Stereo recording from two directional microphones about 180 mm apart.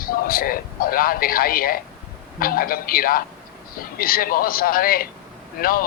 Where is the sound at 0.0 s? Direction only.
55° left (ahead or behind).